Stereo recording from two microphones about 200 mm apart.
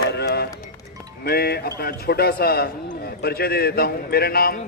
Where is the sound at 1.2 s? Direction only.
50° left (ahead or behind).